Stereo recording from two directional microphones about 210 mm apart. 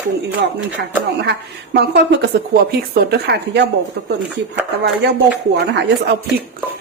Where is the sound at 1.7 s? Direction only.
55° right (ahead or behind).